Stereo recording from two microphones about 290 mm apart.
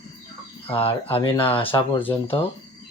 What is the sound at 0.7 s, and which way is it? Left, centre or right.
Speech, centre.